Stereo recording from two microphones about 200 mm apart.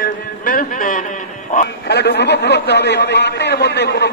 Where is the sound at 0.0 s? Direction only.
45° left (ahead or behind).